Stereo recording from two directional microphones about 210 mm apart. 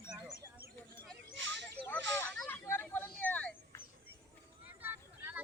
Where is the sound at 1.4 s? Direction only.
60° right (ahead or behind).